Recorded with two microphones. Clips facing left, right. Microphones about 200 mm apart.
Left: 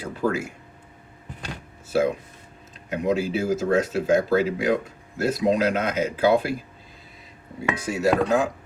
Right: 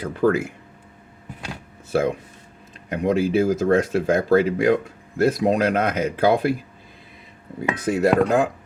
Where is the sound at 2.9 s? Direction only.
55° right (ahead or behind).